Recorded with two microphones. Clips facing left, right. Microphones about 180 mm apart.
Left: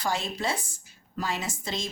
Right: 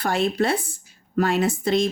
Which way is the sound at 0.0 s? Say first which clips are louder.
Right 8 dB; 60° right (ahead or behind).